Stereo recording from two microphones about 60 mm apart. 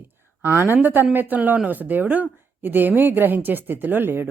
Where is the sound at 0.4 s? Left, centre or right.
Right.